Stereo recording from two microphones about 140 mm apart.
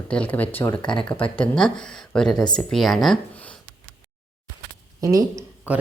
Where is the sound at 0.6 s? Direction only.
30° left (ahead or behind).